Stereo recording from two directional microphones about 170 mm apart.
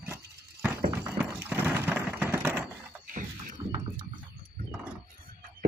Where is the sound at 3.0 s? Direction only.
50° right (ahead or behind).